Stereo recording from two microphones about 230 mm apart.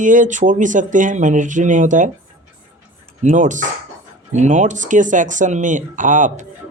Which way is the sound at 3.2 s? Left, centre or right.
Right.